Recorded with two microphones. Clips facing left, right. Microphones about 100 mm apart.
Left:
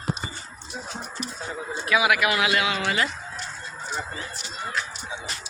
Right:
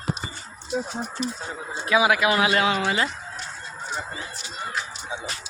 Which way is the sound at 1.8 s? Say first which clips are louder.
Right 2 dB; 30° right (ahead or behind).